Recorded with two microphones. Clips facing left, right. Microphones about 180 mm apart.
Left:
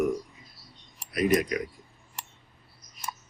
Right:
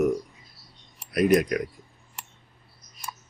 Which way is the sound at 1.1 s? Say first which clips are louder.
Right 4 dB; 60° right (ahead or behind).